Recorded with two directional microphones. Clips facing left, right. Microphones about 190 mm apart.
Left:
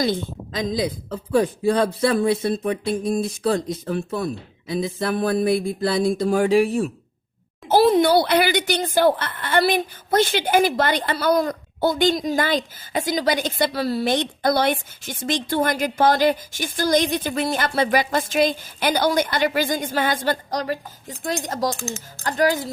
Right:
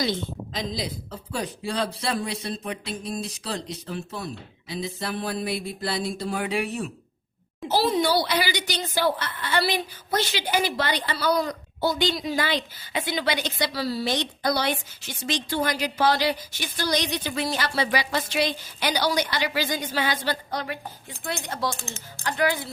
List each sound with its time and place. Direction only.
0.7 s speech: 55° left (ahead or behind)
7.7 s speech: 55° left (ahead or behind)